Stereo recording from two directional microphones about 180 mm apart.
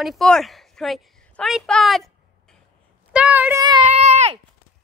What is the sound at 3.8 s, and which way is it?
Speech, 40° right (ahead or behind).